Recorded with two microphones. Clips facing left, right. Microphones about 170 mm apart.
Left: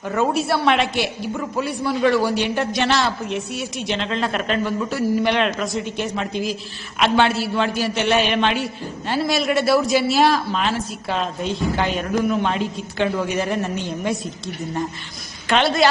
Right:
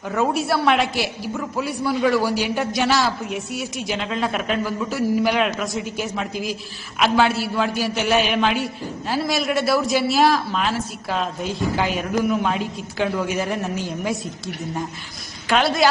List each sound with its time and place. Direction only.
0.1 s a man's voice: centre (ahead or behind)